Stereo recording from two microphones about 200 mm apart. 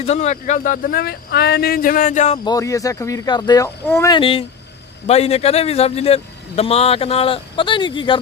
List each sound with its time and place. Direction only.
0.0 s speech: 35° left (ahead or behind)
2.4 s a man's voice: 20° left (ahead or behind)